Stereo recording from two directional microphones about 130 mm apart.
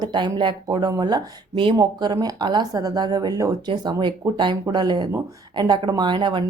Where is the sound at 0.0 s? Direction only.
35° right (ahead or behind).